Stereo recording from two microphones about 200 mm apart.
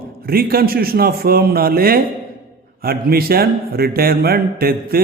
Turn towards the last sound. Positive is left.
turn(degrees=-50)  # may be behind; listen again after turning